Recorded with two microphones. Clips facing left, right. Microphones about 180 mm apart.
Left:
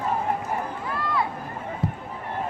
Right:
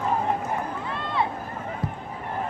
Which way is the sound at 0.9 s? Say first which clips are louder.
Left 1 dB; 25° right (ahead or behind).